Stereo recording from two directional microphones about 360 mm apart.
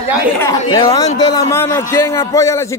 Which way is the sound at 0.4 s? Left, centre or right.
Centre.